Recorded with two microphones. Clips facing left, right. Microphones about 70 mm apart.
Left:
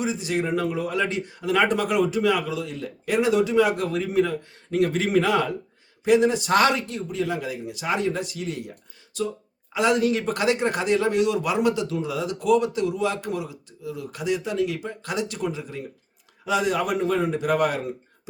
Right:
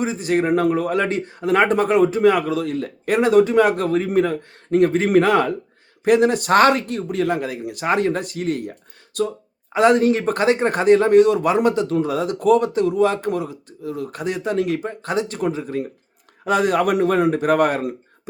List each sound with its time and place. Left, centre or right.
0.0 s a man's voice: right
9.7 s a man's voice: right